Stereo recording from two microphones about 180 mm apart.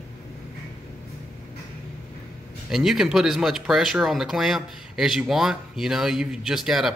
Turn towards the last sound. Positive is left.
turn(degrees=0)  # may be behind; listen again after turning